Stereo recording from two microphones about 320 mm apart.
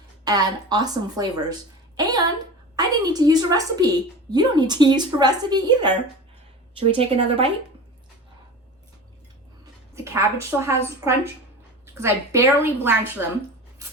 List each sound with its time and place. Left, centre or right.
0.3 s a woman's voice: centre
2.0 s a sound: centre
2.7 s a woman's voice: centre
9.9 s a woman's voice: centre